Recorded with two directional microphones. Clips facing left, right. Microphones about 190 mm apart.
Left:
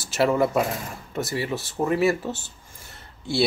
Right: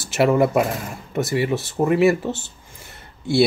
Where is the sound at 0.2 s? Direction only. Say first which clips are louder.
Right 4 dB; 15° right (ahead or behind).